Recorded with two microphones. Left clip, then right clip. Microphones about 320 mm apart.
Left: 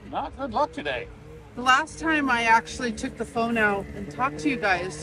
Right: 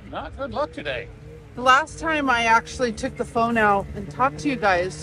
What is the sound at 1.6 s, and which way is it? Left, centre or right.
Speech, centre.